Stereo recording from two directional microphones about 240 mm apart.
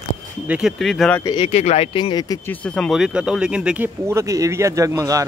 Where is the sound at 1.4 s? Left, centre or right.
Left.